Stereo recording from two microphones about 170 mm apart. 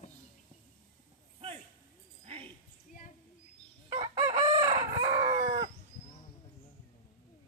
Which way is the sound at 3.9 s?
30° right (ahead or behind).